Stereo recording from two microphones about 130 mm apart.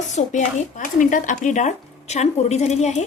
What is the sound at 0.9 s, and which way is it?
Speech, 80° left.